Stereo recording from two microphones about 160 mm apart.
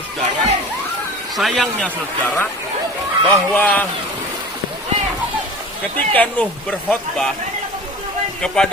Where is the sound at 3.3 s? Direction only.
10° left (ahead or behind).